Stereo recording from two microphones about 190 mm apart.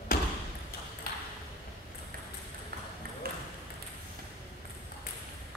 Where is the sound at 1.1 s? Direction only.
45° left (ahead or behind).